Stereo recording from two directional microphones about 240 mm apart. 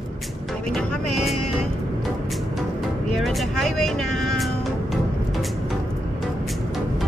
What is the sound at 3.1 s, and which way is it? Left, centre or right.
Music, centre.